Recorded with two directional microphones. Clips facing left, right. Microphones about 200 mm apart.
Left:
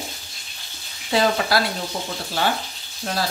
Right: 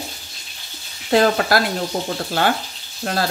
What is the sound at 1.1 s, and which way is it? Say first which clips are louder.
Speech: right 4 dB; 50° right (ahead or behind).